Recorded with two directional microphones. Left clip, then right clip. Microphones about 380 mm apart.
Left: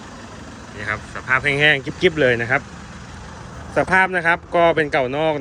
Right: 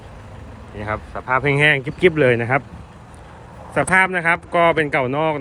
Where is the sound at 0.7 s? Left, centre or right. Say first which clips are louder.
Even; centre.